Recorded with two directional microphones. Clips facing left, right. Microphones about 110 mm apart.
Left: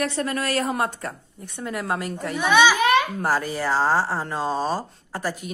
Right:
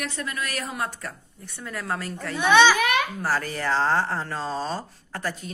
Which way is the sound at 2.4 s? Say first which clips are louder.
Even; 10° left (ahead or behind).